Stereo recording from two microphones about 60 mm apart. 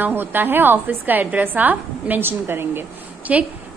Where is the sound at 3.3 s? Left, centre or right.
Centre.